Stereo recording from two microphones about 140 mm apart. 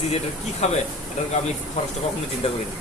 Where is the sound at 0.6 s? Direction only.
55° left (ahead or behind).